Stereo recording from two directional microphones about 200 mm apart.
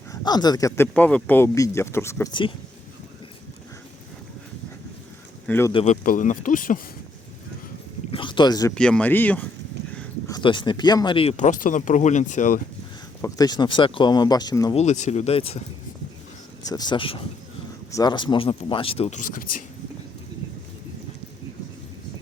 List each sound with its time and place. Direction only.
0.1 s speech: 20° left (ahead or behind)
5.5 s speech: 10° left (ahead or behind)
5.7 s speech: 35° left (ahead or behind)
8.1 s a sound: 25° left (ahead or behind)
8.7 s speech: 5° left (ahead or behind); by 12.6 s 40° left (ahead or behind)
13.2 s speech: 20° left (ahead or behind)
14.8 s speech: 35° left (ahead or behind)
16.6 s speech: 20° left (ahead or behind); by 19.6 s 45° left (ahead or behind)